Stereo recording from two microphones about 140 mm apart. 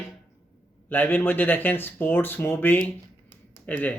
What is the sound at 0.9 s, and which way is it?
Speech, 15° left (ahead or behind).